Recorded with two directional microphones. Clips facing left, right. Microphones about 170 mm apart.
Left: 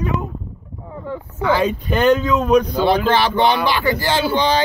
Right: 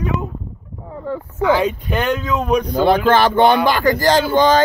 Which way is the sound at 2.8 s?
50° right (ahead or behind).